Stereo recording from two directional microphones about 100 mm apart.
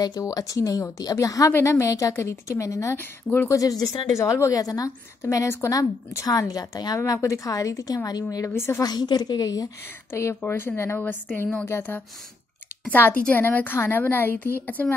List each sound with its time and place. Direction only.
0.0 s a woman's voice: 40° left (ahead or behind)
3.0 s a woman's voice: 20° left (ahead or behind)
3.5 s a woman's voice: 35° left (ahead or behind)
8.5 s a woman's voice: 25° left (ahead or behind)
8.8 s a woman's voice: 40° left (ahead or behind)
10.4 s a woman's voice: 20° left (ahead or behind)